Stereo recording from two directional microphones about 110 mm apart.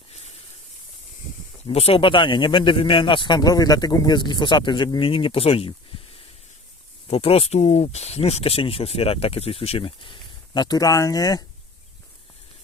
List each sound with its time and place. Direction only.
0.1 s hiss: 75° left (ahead or behind)
1.6 s speech: 60° left (ahead or behind)
7.1 s speech: 65° left (ahead or behind); by 11.4 s 35° left (ahead or behind)